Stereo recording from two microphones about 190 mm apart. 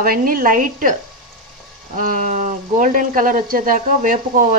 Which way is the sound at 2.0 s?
45° right (ahead or behind).